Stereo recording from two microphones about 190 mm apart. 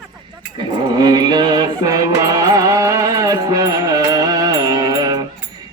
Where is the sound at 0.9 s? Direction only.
20° right (ahead or behind).